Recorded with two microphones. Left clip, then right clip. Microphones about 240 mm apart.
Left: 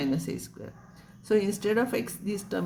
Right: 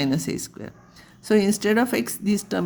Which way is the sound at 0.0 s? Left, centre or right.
Right.